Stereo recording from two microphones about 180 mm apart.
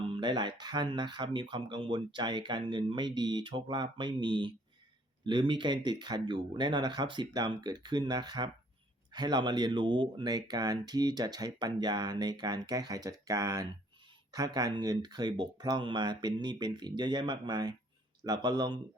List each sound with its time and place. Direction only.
0.0 s speech: 25° right (ahead or behind)